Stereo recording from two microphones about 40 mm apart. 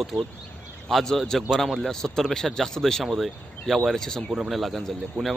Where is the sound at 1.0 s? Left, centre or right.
Centre.